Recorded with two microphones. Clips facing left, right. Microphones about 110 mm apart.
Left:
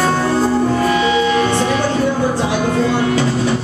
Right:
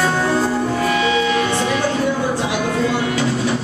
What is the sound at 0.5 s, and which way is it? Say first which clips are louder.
Music: left 4 dB; 25° left (ahead or behind).